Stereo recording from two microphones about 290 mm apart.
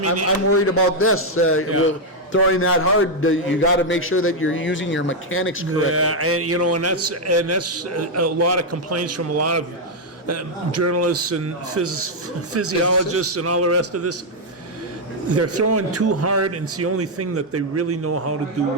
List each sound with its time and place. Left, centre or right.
0.3 s a man's voice: left
5.7 s a man's voice: right
15.3 s a man's voice: right